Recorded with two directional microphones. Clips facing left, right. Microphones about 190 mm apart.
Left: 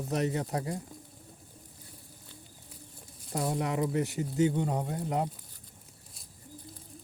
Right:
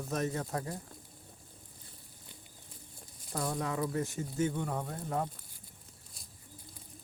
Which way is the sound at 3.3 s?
20° left (ahead or behind).